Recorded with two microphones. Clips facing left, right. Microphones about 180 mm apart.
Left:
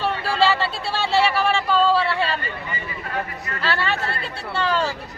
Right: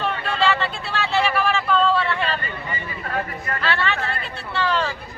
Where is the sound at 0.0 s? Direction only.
30° left (ahead or behind).